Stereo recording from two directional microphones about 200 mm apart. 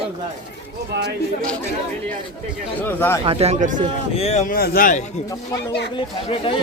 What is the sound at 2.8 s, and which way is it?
Speech, 10° left (ahead or behind).